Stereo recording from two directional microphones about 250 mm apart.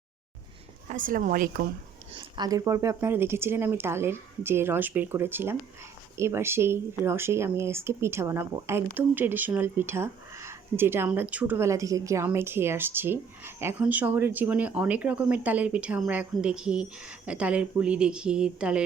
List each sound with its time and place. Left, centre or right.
0.9 s speech: right
2.1 s speech: centre